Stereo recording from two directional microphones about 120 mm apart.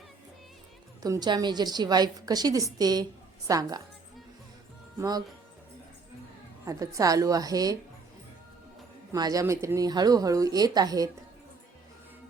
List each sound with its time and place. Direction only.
1.0 s a woman's voice: 35° right (ahead or behind)
4.9 s a woman's voice: 35° right (ahead or behind)
6.7 s a woman's voice: 30° right (ahead or behind)
9.1 s a woman's voice: 30° right (ahead or behind)